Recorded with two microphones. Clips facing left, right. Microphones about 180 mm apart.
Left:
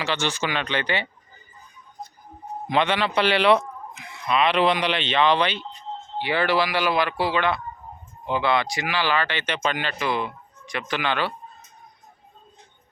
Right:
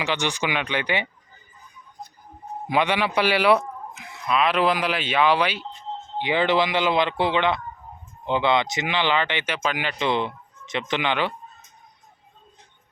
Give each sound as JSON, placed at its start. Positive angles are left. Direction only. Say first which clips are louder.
{"t": 0.0, "sound": "speech", "louder": "right 1 dB", "side_deg": -15}
{"t": 2.6, "sound": "speech", "louder": "even", "side_deg": -10}
{"t": 6.1, "sound": "speech", "louder": "right 1 dB", "side_deg": -20}
{"t": 10.0, "sound": "speech", "louder": "right 5 dB", "side_deg": -25}